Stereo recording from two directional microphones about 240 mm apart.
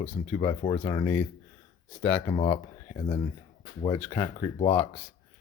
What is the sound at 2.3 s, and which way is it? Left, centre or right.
Speech, left.